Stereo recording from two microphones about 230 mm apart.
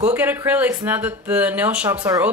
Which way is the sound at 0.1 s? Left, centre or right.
Centre.